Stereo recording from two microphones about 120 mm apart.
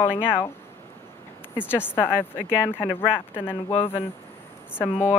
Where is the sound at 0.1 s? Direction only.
45° left (ahead or behind).